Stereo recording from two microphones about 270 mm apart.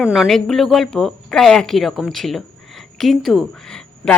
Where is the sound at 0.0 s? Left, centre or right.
Centre.